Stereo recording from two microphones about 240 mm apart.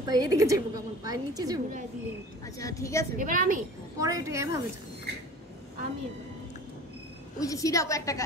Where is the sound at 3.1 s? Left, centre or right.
Right.